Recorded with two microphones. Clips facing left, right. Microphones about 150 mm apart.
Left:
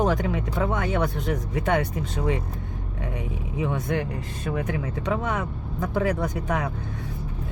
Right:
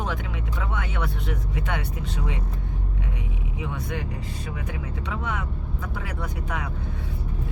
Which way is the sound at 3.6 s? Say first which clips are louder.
Left 6 dB; 45° left (ahead or behind).